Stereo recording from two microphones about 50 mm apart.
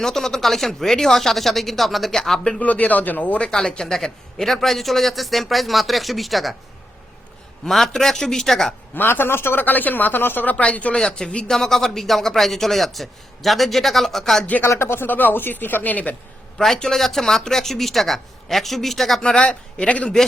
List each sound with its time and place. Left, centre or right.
0.0 s a man's voice: centre
2.6 s speech: left
3.5 s a man's voice: centre
7.6 s a man's voice: centre
9.0 s speech: left
10.9 s a man's voice: centre
14.7 s speech: left
15.0 s speech: left
16.6 s a man's voice: centre
19.2 s a man's voice: centre